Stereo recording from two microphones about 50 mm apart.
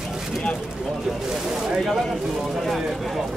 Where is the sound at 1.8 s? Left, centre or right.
Centre.